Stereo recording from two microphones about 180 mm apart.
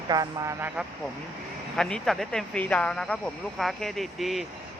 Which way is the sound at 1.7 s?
5° left (ahead or behind).